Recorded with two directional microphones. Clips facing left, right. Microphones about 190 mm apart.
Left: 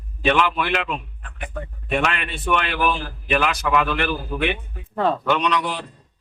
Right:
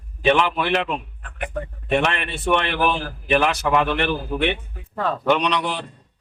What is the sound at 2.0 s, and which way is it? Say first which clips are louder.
A man's voice: right 1 dB; 25° right (ahead or behind).